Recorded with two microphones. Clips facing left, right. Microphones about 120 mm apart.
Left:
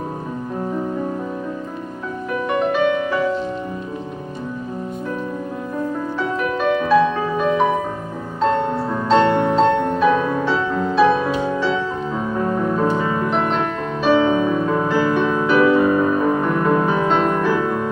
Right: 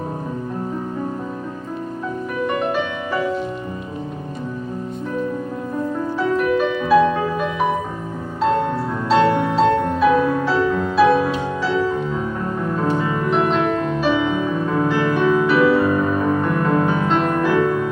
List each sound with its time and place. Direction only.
6.1 s music: centre (ahead or behind)
9.0 s music: 5° right (ahead or behind)
13.3 s music: centre (ahead or behind)
14.2 s music: 30° left (ahead or behind)
14.8 s music: centre (ahead or behind)
15.7 s music: 15° left (ahead or behind)